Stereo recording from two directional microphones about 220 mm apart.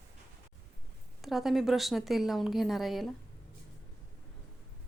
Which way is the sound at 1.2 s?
Centre (ahead or behind).